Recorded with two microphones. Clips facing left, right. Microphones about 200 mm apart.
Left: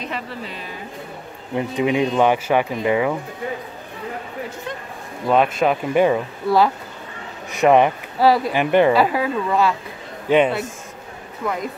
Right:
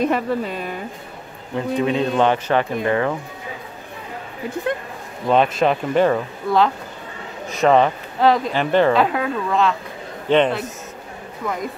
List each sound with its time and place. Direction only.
0.0 s speech: 50° right (ahead or behind)
1.5 s speech: 15° left (ahead or behind)
4.7 s a sound: 60° right (ahead or behind)
5.3 s speech: 5° left (ahead or behind)